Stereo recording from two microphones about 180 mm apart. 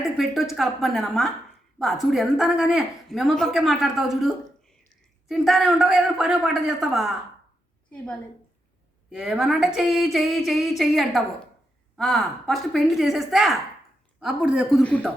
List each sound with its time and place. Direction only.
0.5 s a woman's voice: centre (ahead or behind)
5.3 s a woman's voice: centre (ahead or behind)
9.0 s a woman's voice: 5° right (ahead or behind)